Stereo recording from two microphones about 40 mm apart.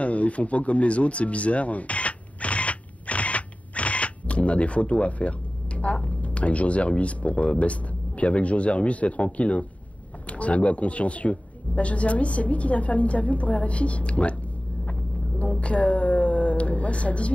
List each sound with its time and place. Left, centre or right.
0.0 s speech: left
14.9 s vehicle: left
15.6 s a sound: left